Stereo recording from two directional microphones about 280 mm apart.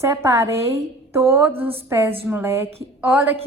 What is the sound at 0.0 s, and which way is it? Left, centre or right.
A woman's voice, centre.